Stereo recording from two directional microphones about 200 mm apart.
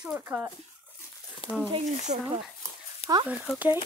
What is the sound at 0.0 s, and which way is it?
Speech, 10° right (ahead or behind).